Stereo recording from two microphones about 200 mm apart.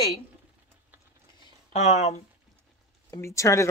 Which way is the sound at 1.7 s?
35° left (ahead or behind).